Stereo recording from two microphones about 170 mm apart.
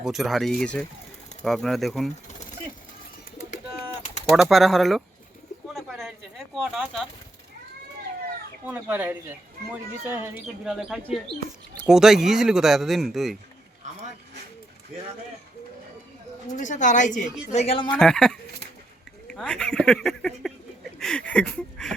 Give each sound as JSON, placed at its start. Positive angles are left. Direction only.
{"t": 0.0, "sound": "speech", "side_deg": 0}
{"t": 4.3, "sound": "speech", "side_deg": -5}
{"t": 5.6, "sound": "pigeon", "side_deg": 0}
{"t": 8.6, "sound": "speech", "side_deg": -10}
{"t": 10.6, "sound": "speech", "side_deg": -5}
{"t": 16.5, "sound": "a woman's voice", "side_deg": 45}
{"t": 17.9, "sound": "speech", "side_deg": 5}
{"t": 21.0, "sound": "a sound", "side_deg": 5}